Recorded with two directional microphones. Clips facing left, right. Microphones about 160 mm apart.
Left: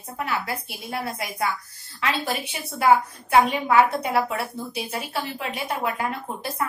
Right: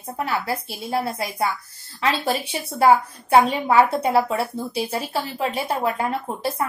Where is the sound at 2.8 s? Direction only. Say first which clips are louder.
Right 2 dB; 30° right (ahead or behind).